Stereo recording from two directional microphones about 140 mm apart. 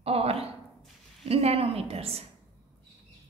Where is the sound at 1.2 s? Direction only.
45° right (ahead or behind).